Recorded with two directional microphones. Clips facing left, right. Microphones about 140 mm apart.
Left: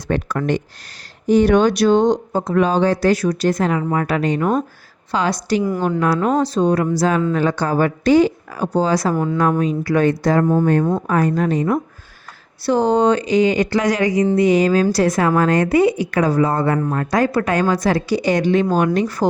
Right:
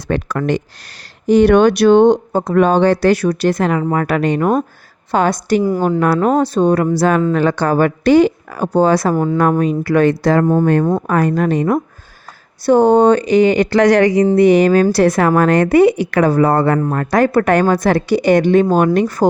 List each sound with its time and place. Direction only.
0.1 s speech: 85° right
1.3 s a woman's voice: 70° right (ahead or behind)
9.1 s a woman's voice: 40° right (ahead or behind)
9.4 s speech: 60° right (ahead or behind); by 10.4 s 75° right (ahead or behind)
10.4 s a woman's voice: 50° right (ahead or behind)
11.0 s speech: 65° right (ahead or behind)
12.6 s a woman's voice: 55° right (ahead or behind)